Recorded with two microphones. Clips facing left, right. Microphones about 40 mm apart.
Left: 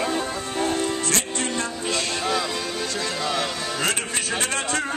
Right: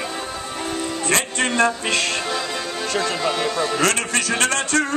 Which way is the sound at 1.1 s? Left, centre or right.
Right.